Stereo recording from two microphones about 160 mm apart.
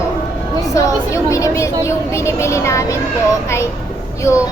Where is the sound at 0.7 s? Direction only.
20° left (ahead or behind).